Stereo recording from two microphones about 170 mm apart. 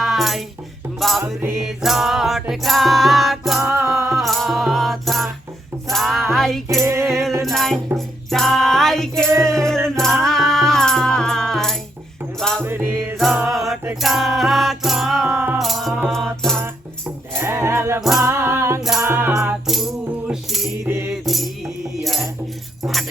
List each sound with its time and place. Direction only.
0.0 s music: centre (ahead or behind)
6.8 s music: 15° right (ahead or behind)
7.1 s music: centre (ahead or behind)
12.6 s music: 10° right (ahead or behind)
17.3 s music: 15° right (ahead or behind)
18.8 s music: centre (ahead or behind)
19.0 s music: 15° right (ahead or behind)
21.2 s music: centre (ahead or behind)